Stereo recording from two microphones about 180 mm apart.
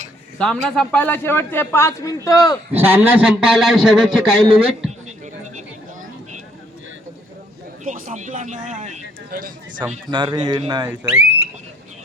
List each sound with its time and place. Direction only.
0.3 s a man's voice: 5° left (ahead or behind); by 2.6 s 20° left (ahead or behind)
2.7 s a man's voice: 10° right (ahead or behind)
4.9 s a sound: 40° right (ahead or behind)
7.9 s speech: 40° right (ahead or behind)
10.1 s speech: 25° right (ahead or behind)